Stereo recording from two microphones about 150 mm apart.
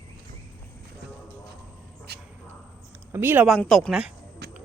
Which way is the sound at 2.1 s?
90° right.